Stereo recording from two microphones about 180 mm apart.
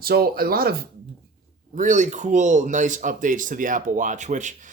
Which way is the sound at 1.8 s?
45° right (ahead or behind).